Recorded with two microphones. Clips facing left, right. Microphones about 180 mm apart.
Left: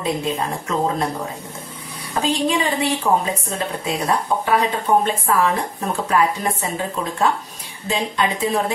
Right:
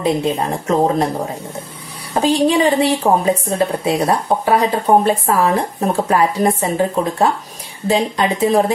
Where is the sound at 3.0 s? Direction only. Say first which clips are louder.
Right 5 dB; 35° right (ahead or behind).